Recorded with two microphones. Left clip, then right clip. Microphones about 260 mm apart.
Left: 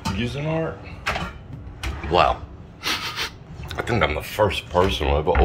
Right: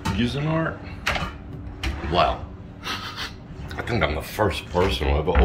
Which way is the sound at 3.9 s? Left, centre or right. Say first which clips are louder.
Left 2 dB; centre.